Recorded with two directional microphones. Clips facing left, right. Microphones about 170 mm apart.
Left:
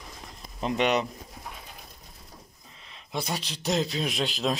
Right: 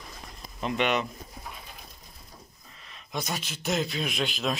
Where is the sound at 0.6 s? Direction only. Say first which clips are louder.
Left 2 dB; 35° left (ahead or behind).